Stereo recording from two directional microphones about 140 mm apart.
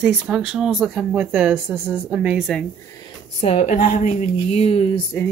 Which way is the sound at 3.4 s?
55° left (ahead or behind).